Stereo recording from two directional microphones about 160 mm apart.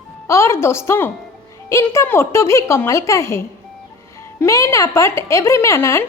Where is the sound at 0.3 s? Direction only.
20° left (ahead or behind).